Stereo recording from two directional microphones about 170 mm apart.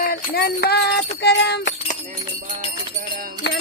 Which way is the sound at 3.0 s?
55° right (ahead or behind).